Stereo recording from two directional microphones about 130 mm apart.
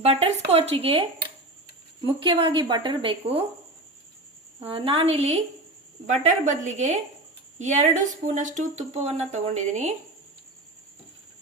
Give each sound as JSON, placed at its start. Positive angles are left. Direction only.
{"t": 0.0, "sound": "a woman's voice", "side_deg": -50}
{"t": 4.6, "sound": "speech", "side_deg": -45}
{"t": 6.1, "sound": "a woman's voice", "side_deg": -70}